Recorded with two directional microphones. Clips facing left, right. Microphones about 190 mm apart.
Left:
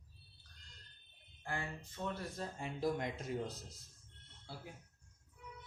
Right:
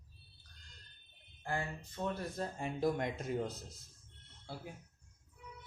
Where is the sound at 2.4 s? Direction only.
55° right (ahead or behind).